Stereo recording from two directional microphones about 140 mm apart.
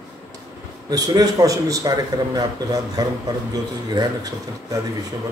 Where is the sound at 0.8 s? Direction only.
30° right (ahead or behind).